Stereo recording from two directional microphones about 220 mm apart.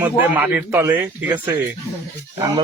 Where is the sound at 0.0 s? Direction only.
10° right (ahead or behind).